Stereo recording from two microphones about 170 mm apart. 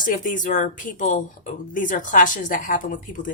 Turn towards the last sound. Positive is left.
turn(degrees=50)  # may be behind; listen again after turning